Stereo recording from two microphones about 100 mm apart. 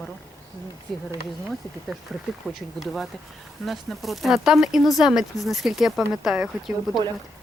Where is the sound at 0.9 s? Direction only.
Centre (ahead or behind).